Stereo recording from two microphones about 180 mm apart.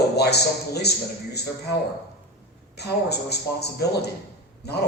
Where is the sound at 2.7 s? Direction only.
65° left (ahead or behind).